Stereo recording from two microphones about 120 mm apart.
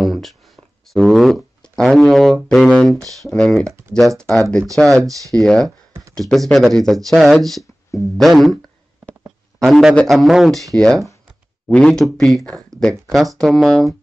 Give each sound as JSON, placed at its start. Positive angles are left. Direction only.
{"t": 0.0, "sound": "a sound", "side_deg": 0}
{"t": 3.0, "sound": "speech", "side_deg": -30}
{"t": 3.3, "sound": "speech", "side_deg": 5}
{"t": 4.7, "sound": "speech", "side_deg": 5}
{"t": 9.6, "sound": "a man's voice", "side_deg": 0}